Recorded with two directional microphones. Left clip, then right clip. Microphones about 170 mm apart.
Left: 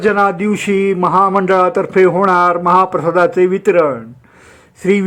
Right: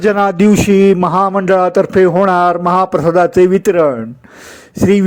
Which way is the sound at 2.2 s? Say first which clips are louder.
Even; 25° right (ahead or behind).